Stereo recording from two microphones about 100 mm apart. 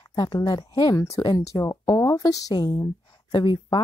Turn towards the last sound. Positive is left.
turn(degrees=50)  # may be behind; listen again after turning